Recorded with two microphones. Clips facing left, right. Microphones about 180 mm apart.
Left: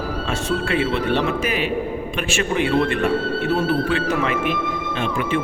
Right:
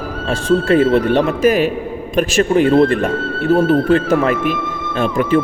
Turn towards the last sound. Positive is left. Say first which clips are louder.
# right 7 dB
turn(degrees=-40)  # may be behind; listen again after turning